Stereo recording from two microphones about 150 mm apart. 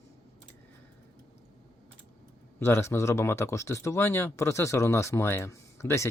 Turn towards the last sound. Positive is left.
turn(degrees=20)  # may be behind; listen again after turning